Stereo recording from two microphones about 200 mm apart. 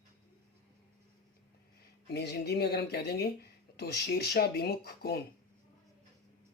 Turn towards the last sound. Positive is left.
turn(degrees=50)  # may be behind; listen again after turning